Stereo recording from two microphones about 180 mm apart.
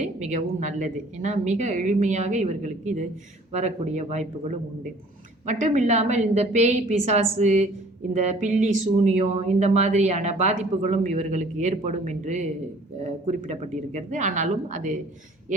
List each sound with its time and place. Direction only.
0.2 s speech: 40° right (ahead or behind)
5.5 s speech: 40° right (ahead or behind)